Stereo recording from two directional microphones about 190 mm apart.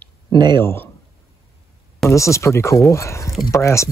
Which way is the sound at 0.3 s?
20° right (ahead or behind).